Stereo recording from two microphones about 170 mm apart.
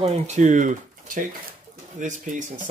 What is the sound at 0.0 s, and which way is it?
Speech, 45° right (ahead or behind).